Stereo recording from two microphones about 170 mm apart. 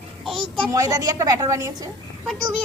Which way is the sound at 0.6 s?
20° right (ahead or behind).